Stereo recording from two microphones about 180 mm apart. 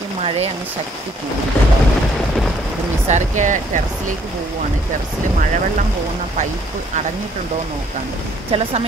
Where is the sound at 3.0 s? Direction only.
40° right (ahead or behind).